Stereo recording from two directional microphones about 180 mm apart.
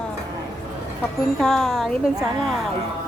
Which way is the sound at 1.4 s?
Centre (ahead or behind).